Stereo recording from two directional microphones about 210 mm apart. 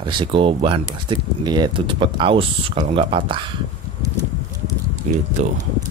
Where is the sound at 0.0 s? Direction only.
20° right (ahead or behind).